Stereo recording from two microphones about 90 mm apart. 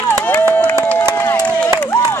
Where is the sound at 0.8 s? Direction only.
25° left (ahead or behind).